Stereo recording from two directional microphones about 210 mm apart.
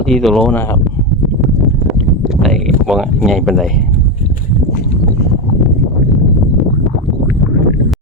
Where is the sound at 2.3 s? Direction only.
Centre (ahead or behind).